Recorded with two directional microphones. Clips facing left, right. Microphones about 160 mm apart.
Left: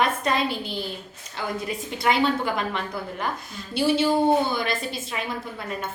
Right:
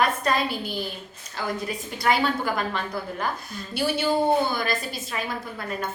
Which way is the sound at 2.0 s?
25° left (ahead or behind).